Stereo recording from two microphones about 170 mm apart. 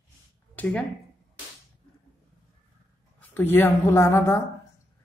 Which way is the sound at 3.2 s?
10° left (ahead or behind).